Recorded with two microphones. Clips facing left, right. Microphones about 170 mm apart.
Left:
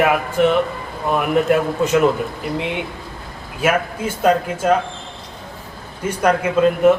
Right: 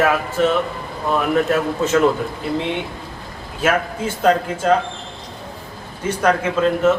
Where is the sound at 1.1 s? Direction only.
15° left (ahead or behind).